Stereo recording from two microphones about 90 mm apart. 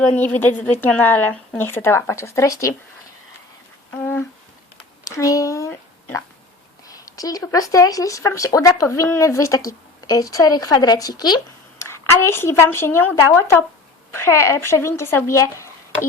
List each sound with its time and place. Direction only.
0.2 s speech: 20° left (ahead or behind)
3.9 s a sound: 25° left (ahead or behind)
5.0 s speech: 40° left (ahead or behind)
6.8 s a woman's voice: 40° left (ahead or behind)
11.8 s a woman's voice: 30° left (ahead or behind)